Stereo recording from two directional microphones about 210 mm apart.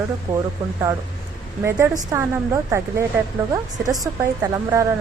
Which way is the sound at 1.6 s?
10° right (ahead or behind).